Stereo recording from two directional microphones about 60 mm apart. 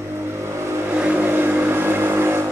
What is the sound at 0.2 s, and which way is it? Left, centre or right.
Vehicle, right.